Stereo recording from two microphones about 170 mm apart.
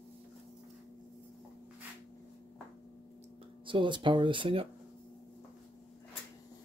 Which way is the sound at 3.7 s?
30° right (ahead or behind).